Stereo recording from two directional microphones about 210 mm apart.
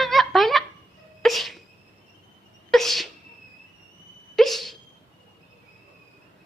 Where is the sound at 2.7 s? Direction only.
Centre (ahead or behind).